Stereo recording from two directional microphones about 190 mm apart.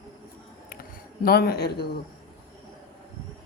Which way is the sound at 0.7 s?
50° left (ahead or behind).